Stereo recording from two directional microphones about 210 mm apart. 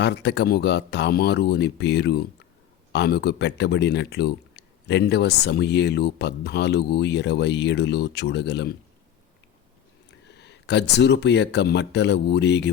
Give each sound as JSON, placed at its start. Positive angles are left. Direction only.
{"t": 0.0, "sound": "speech", "side_deg": 55}
{"t": 10.1, "sound": "speech", "side_deg": 55}